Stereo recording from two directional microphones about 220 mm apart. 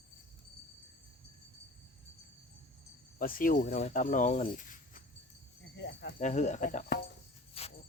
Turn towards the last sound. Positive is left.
turn(degrees=25)  # may be behind; listen again after turning